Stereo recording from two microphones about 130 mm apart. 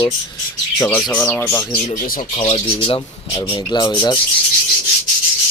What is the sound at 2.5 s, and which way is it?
Speech, 35° left (ahead or behind).